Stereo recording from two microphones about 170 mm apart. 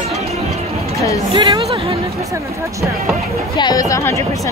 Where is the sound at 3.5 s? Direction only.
25° left (ahead or behind).